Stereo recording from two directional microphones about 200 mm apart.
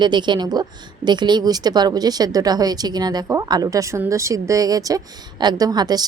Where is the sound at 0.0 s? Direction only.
20° right (ahead or behind).